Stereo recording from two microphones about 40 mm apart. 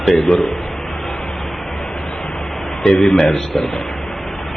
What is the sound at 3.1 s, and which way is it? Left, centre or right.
Speech, centre.